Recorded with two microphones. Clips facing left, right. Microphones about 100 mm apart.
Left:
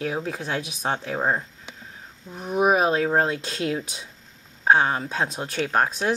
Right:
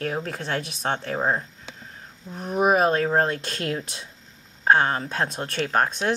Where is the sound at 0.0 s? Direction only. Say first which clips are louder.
Left 1 dB; 5° left (ahead or behind).